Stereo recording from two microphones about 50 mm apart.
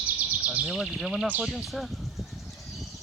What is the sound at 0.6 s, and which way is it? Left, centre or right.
Bird, centre.